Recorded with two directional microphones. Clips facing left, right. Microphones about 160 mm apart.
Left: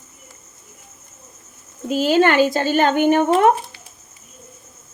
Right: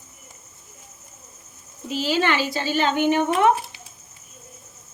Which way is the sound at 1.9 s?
50° left (ahead or behind).